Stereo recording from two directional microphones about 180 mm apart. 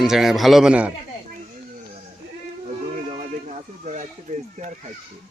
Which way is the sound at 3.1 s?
40° right (ahead or behind).